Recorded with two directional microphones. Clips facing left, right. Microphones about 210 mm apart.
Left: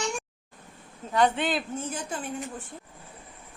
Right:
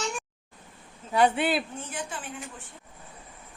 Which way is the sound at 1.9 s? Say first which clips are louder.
Left 3 dB; 40° left (ahead or behind).